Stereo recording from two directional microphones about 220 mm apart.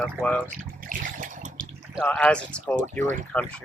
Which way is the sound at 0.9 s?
35° right (ahead or behind).